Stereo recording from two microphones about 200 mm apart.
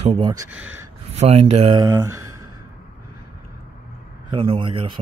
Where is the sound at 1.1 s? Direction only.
30° right (ahead or behind).